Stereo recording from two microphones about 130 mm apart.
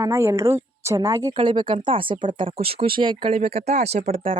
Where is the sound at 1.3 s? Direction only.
40° right (ahead or behind).